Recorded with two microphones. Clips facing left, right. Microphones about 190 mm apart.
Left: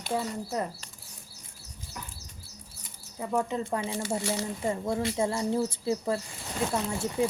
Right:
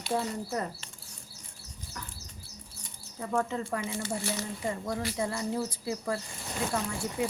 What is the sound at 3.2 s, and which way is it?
Speech, 15° left (ahead or behind).